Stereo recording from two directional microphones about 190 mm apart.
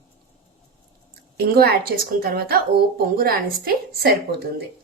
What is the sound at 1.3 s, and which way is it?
A woman's voice, 55° right (ahead or behind).